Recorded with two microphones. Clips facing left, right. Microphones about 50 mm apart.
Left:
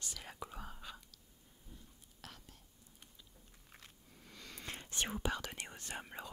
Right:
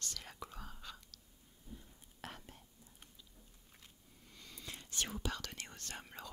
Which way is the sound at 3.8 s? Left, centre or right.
Left.